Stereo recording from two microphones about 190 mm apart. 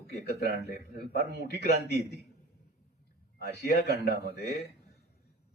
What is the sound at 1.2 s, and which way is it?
Speech, 60° right (ahead or behind).